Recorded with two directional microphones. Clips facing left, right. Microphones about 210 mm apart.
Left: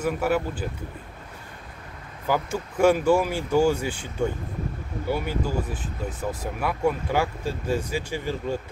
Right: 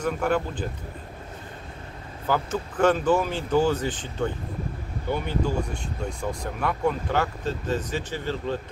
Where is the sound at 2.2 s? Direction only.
10° left (ahead or behind).